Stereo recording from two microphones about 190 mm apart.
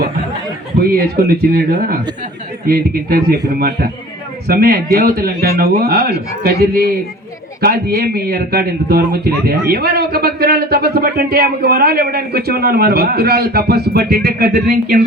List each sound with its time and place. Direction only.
0.8 s speech: 55° right (ahead or behind)